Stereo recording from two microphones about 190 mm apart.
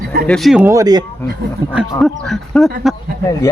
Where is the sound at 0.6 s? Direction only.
15° right (ahead or behind).